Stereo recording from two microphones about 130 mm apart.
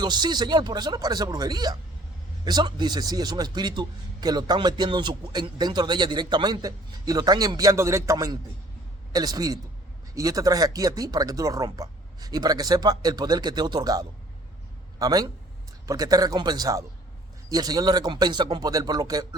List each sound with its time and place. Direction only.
0.0 s a man's voice: 35° right (ahead or behind)